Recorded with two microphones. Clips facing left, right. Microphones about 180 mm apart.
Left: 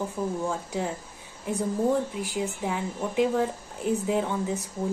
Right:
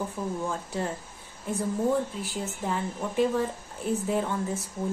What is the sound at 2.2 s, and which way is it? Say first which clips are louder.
A woman's voice: left 3 dB; 10° left (ahead or behind).